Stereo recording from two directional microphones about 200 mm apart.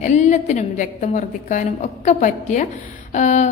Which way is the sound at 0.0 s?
35° left (ahead or behind).